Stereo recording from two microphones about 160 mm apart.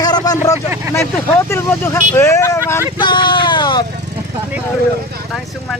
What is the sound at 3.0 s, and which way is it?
Speech, 30° left (ahead or behind).